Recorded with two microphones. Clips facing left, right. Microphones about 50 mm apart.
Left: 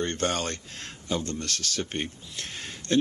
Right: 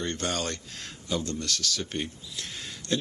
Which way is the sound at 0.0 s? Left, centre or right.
Left.